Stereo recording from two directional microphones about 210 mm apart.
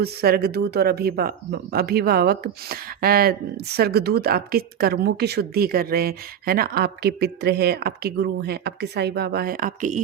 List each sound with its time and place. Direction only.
0.0 s speech: 50° right (ahead or behind)